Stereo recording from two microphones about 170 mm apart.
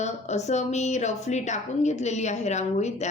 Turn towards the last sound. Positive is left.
turn(degrees=40)  # may be behind; listen again after turning